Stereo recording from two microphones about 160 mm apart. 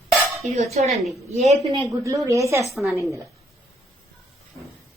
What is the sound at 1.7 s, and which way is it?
Speech, 20° right (ahead or behind).